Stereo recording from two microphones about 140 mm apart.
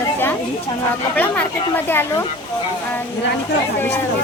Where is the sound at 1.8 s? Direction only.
15° left (ahead or behind).